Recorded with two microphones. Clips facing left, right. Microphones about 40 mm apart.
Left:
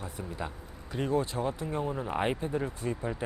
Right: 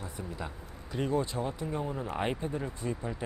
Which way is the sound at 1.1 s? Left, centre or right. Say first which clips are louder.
Left 2 dB; left.